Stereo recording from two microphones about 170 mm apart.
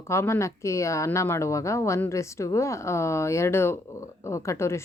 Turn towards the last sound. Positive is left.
turn(degrees=15)  # may be behind; listen again after turning